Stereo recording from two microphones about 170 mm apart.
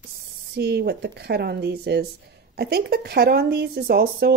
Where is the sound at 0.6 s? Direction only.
75° right (ahead or behind).